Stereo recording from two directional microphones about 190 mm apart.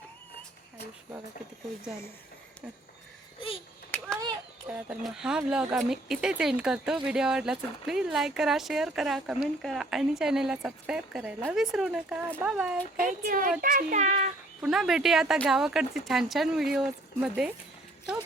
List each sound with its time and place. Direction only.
4.1 s a sound: 20° right (ahead or behind)
4.9 s speech: 5° right (ahead or behind)
13.0 s speech: 45° right (ahead or behind)
14.6 s speech: centre (ahead or behind)